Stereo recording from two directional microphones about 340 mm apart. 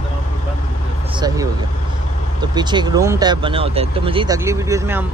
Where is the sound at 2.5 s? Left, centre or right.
Centre.